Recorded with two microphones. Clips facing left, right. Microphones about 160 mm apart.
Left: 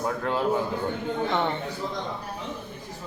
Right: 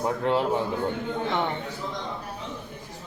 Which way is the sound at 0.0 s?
25° right (ahead or behind).